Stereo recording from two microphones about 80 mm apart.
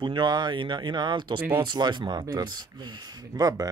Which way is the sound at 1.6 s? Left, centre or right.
Right.